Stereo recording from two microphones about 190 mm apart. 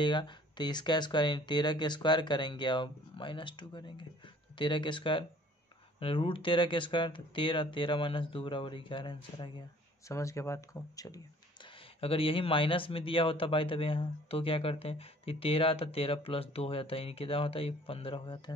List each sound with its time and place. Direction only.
0.0 s speech: 25° left (ahead or behind)
11.6 s speech: 30° left (ahead or behind)